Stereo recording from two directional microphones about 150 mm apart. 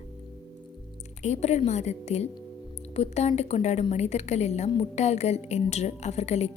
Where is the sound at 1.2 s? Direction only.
50° left (ahead or behind).